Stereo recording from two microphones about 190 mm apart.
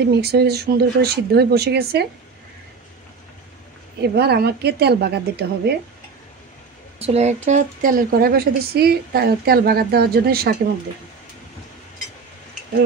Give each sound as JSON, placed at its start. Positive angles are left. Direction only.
{"t": 0.1, "sound": "speech", "side_deg": -55}
{"t": 4.0, "sound": "speech", "side_deg": -60}
{"t": 7.0, "sound": "a woman's voice", "side_deg": -35}